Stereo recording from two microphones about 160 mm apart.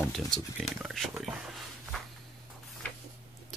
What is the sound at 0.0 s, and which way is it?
Speech, centre (ahead or behind).